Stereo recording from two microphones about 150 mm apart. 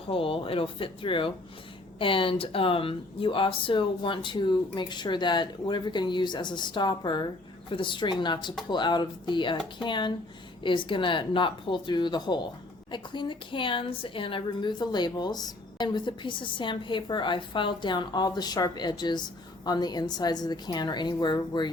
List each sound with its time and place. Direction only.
0.1 s a woman's voice: 35° left (ahead or behind)